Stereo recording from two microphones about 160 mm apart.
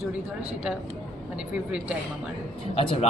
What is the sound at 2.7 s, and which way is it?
Speech, 35° left (ahead or behind).